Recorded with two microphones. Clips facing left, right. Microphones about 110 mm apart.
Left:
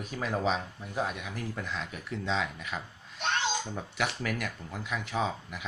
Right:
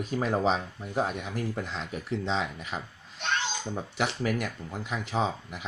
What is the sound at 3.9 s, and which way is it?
Speech, 30° right (ahead or behind).